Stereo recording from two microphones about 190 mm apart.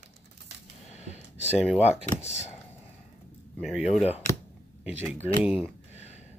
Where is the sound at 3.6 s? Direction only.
Centre (ahead or behind).